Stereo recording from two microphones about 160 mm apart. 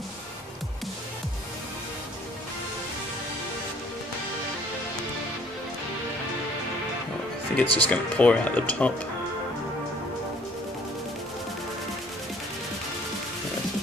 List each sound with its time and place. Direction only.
7.6 s speech: 25° right (ahead or behind)
7.9 s speech: 10° left (ahead or behind)